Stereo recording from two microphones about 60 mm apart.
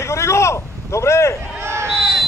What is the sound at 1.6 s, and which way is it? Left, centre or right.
Basketball bounce, right.